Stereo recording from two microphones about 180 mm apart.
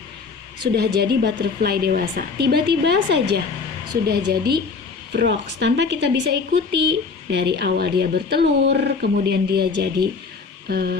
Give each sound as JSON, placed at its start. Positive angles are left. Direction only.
{"t": 0.7, "sound": "a woman's voice", "side_deg": -65}